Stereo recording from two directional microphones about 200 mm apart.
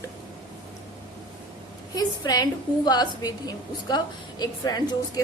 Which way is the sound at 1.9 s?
20° left (ahead or behind).